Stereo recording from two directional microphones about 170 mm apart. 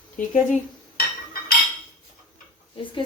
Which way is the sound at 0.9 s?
65° left (ahead or behind).